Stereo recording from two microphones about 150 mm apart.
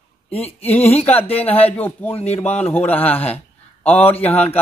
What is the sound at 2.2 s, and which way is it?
Speech, 45° left (ahead or behind).